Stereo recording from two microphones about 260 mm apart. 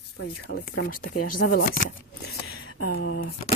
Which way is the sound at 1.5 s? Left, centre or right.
Left.